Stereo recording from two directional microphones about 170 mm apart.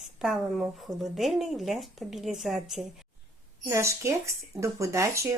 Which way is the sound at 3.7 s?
15° right (ahead or behind).